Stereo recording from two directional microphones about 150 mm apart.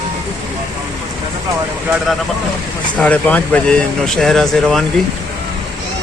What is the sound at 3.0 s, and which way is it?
Speech, 10° left (ahead or behind).